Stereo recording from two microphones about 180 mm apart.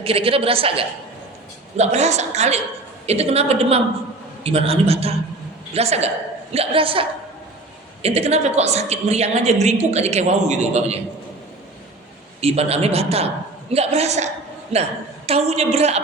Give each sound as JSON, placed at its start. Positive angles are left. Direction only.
{"t": 0.0, "sound": "a woman's voice", "side_deg": -30}
{"t": 12.4, "sound": "a woman's voice", "side_deg": -35}
{"t": 15.3, "sound": "a woman's voice", "side_deg": -35}